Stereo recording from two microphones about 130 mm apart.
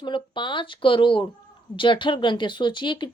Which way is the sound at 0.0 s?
40° left (ahead or behind).